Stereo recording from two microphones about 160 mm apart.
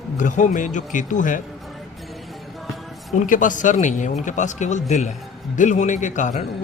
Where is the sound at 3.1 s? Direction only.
55° left (ahead or behind).